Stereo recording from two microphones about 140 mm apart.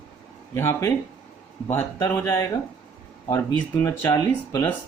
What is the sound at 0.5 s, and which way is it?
Speech, 20° left (ahead or behind).